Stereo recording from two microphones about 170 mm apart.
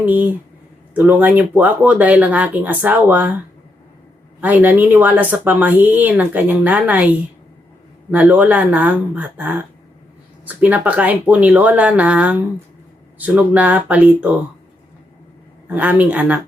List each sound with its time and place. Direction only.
0.0 s speech: 10° right (ahead or behind)
4.4 s speech: 10° right (ahead or behind)
8.1 s speech: 10° right (ahead or behind)
15.6 s speech: 10° right (ahead or behind)